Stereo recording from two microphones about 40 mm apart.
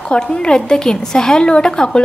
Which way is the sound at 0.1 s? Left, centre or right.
Left.